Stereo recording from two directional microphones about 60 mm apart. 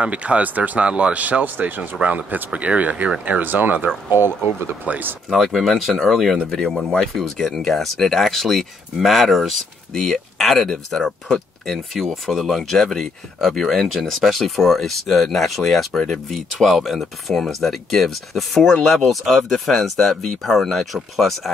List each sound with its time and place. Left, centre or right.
0.0 s speech: centre
5.3 s speech: centre